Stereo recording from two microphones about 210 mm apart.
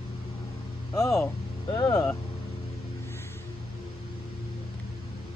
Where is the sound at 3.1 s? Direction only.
10° left (ahead or behind).